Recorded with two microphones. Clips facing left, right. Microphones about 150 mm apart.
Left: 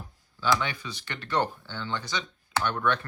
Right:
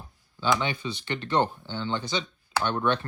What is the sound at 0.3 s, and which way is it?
Speech, 25° right (ahead or behind).